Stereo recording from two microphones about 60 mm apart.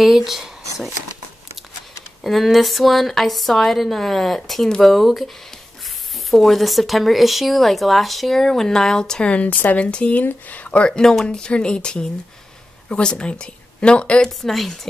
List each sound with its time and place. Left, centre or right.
0.0 s speech: centre
2.2 s speech: centre
6.3 s a woman's voice: centre